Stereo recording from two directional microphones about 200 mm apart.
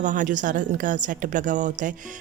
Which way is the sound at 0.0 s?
40° right (ahead or behind).